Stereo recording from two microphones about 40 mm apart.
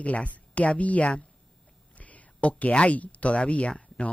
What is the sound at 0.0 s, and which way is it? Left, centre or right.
A woman's voice, left.